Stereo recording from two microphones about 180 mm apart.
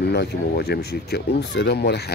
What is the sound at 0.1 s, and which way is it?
Speech, 65° left (ahead or behind).